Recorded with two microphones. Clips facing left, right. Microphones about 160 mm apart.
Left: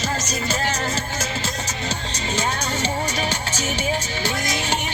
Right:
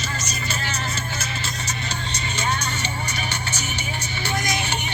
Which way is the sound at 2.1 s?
90° left.